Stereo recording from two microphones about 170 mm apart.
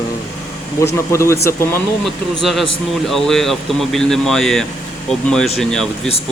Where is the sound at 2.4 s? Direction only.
Centre (ahead or behind).